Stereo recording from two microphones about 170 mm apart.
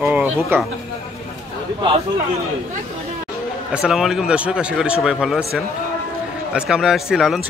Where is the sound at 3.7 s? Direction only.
5° right (ahead or behind).